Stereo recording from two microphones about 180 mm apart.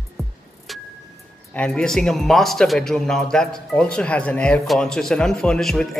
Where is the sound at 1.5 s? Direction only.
5° left (ahead or behind).